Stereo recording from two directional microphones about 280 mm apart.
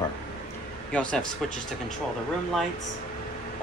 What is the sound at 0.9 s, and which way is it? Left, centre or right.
Speech, centre.